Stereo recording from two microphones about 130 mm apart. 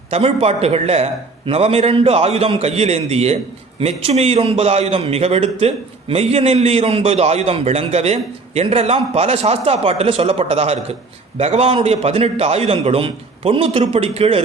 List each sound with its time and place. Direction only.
0.1 s a man's voice: 50° right (ahead or behind)